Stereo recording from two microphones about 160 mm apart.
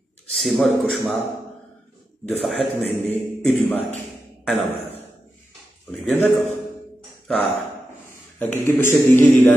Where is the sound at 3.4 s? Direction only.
5° left (ahead or behind).